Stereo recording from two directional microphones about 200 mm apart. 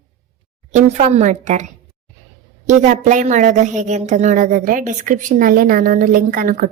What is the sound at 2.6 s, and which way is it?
A woman's voice, 35° right (ahead or behind).